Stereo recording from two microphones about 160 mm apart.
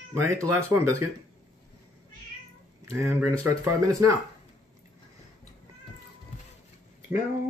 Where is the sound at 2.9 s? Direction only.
20° right (ahead or behind).